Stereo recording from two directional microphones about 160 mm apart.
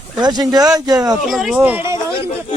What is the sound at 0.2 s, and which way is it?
Speech, 25° right (ahead or behind).